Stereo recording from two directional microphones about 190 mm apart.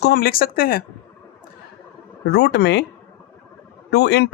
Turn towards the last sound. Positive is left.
turn(degrees=60)  # may be behind; listen again after turning